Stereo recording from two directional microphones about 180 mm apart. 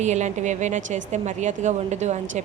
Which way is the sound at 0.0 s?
40° right (ahead or behind).